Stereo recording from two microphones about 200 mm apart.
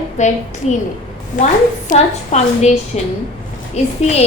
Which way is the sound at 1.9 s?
35° left (ahead or behind).